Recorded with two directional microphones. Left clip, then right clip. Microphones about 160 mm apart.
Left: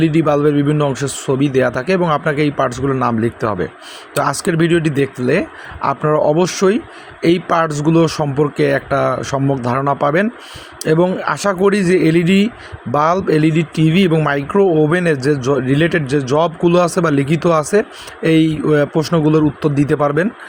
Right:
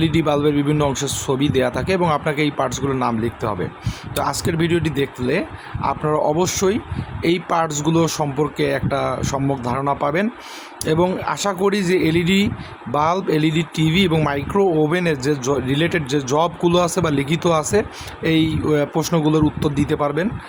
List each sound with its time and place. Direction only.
0.0 s speech: 15° left (ahead or behind)
3.1 s speech: 25° left (ahead or behind)